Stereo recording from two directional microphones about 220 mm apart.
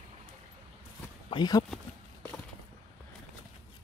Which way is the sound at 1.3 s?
20° left (ahead or behind).